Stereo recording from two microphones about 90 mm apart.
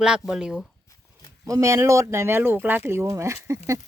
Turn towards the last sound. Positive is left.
turn(degrees=-35)  # may be behind; listen again after turning